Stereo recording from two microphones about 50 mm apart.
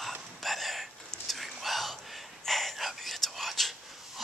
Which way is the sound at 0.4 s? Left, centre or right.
Centre.